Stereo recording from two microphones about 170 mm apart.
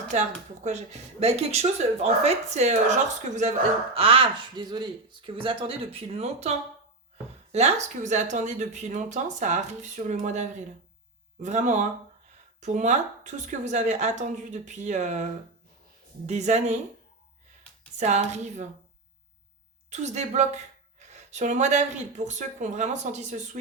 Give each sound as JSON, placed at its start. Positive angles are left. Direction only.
{"t": 0.6, "sound": "speech", "side_deg": -40}
{"t": 3.9, "sound": "speech", "side_deg": -35}
{"t": 17.9, "sound": "speech", "side_deg": -40}
{"t": 19.9, "sound": "speech", "side_deg": -40}